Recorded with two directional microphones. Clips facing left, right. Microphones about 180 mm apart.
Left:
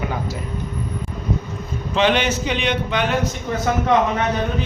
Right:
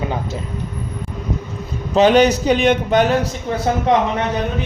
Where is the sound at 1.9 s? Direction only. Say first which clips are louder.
Right 7 dB; 40° right (ahead or behind).